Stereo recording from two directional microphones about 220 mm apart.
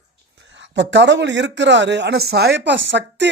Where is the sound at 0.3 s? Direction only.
55° right (ahead or behind).